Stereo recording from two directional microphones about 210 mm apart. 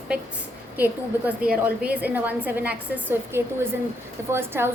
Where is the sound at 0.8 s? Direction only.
5° right (ahead or behind).